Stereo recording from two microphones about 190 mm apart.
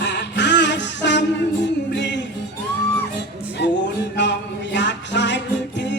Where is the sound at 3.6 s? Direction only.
60° left (ahead or behind).